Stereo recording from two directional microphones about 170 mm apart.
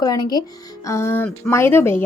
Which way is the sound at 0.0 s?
25° left (ahead or behind).